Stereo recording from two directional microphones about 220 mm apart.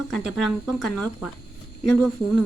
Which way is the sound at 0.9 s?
90° left.